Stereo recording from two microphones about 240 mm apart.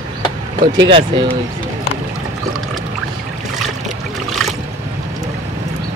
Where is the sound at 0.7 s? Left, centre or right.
Centre.